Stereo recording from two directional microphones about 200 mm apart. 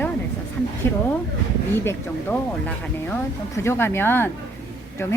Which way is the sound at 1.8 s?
10° left (ahead or behind).